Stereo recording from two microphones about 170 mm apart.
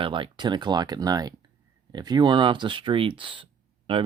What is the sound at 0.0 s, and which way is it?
Speech, 30° right (ahead or behind).